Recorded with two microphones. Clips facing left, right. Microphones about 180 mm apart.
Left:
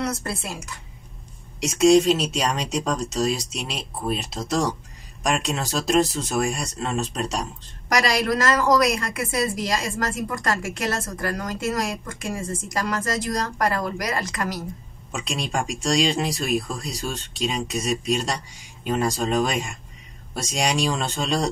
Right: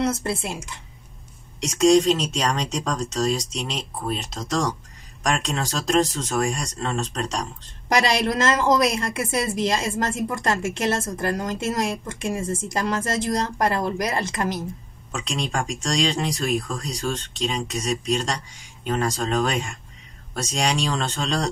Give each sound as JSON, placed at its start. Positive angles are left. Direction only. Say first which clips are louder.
{"t": 0.0, "sound": "a woman's voice", "louder": "right 4 dB", "side_deg": -25}
{"t": 1.6, "sound": "speech", "louder": "left 1 dB", "side_deg": 5}
{"t": 7.9, "sound": "a woman's voice", "louder": "right 1 dB", "side_deg": -25}
{"t": 15.0, "sound": "speech", "louder": "right 1 dB", "side_deg": 10}